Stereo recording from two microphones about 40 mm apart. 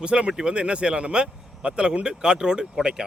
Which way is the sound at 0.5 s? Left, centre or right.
Right.